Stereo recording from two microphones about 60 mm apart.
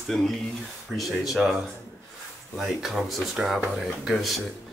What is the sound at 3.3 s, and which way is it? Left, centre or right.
Speech, centre.